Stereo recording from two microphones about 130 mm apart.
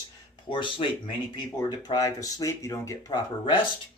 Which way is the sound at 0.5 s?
40° left (ahead or behind).